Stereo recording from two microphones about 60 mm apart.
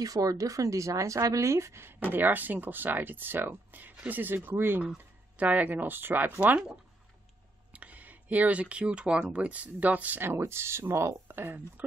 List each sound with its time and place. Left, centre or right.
0.0 s a woman's voice: right
2.0 s speech: right
4.9 s speech: right
6.4 s speech: centre
7.7 s speech: right
10.4 s speech: right
11.3 s speech: right